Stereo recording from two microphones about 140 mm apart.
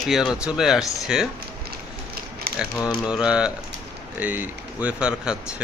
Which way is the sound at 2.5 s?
90° right.